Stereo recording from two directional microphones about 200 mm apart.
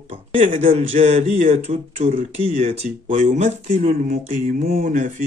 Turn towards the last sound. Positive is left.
turn(degrees=-40)  # may be behind; listen again after turning